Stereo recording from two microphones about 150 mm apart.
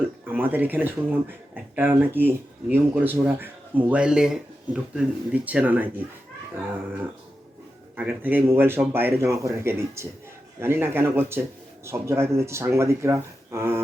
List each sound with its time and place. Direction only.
0.3 s speech: 15° right (ahead or behind)
7.9 s speech: 10° right (ahead or behind)